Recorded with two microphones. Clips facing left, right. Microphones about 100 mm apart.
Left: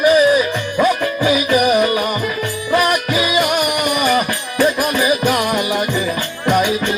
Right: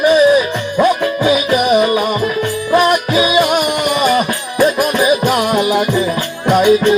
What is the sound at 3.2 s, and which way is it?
Music, 20° right (ahead or behind).